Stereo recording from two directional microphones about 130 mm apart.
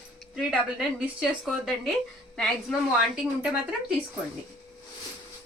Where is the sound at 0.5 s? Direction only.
10° right (ahead or behind).